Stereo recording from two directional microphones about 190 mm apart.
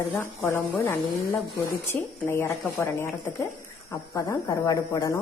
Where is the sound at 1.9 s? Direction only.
10° left (ahead or behind).